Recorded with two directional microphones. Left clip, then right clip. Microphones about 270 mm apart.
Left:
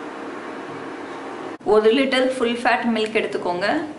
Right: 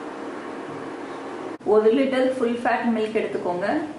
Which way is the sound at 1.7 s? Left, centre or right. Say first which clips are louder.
Left 2 dB; centre.